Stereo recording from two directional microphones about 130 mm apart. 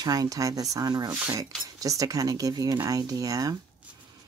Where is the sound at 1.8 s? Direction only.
25° right (ahead or behind).